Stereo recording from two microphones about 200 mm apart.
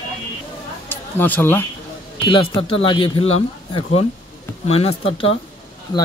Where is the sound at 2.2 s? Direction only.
20° left (ahead or behind).